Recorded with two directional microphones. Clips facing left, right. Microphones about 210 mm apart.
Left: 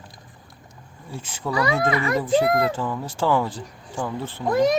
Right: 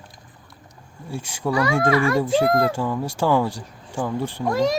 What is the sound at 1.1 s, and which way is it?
Speech, 10° right (ahead or behind).